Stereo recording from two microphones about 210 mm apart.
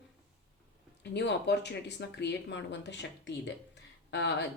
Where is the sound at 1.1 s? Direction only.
55° left (ahead or behind).